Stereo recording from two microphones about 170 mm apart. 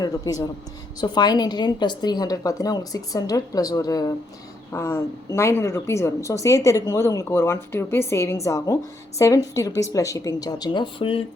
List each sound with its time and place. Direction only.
0.0 s a woman's voice: 20° left (ahead or behind)